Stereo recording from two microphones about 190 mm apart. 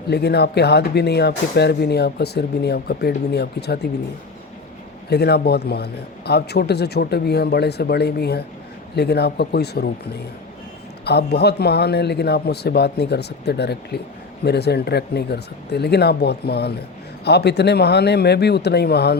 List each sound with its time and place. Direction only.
0.1 s speech: 60° left (ahead or behind)
5.0 s speech: 60° left (ahead or behind)
11.0 s speech: 60° left (ahead or behind)